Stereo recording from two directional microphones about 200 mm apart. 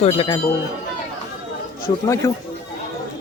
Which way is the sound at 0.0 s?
25° left (ahead or behind).